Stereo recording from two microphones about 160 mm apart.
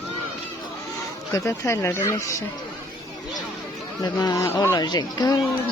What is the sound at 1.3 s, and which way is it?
Speech, 15° left (ahead or behind).